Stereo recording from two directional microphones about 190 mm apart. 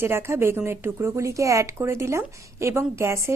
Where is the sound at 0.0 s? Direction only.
15° right (ahead or behind).